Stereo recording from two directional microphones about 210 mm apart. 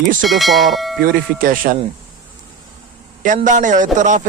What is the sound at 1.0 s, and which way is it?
Speech, 40° right (ahead or behind).